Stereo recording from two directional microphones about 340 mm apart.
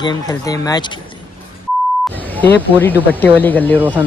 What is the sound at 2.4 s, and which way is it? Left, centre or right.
Speech, centre.